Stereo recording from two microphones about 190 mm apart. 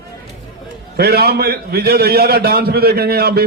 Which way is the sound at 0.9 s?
55° right (ahead or behind).